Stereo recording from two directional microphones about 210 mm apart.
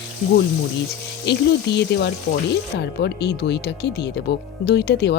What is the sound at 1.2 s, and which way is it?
Speech, 55° left (ahead or behind).